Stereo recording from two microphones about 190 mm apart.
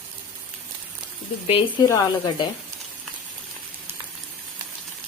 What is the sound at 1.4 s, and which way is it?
Speech, 30° left (ahead or behind).